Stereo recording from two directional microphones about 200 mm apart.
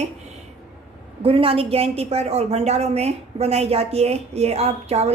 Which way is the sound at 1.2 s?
30° right (ahead or behind).